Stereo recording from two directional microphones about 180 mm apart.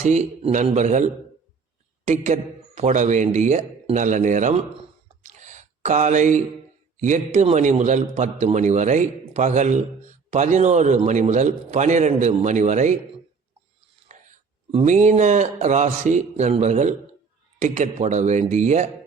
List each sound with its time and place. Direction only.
0.0 s a man's voice: 40° right (ahead or behind)
5.2 s a sound: 40° right (ahead or behind)
6.9 s a man's voice: 45° right (ahead or behind)
14.1 s a man's voice: 35° right (ahead or behind)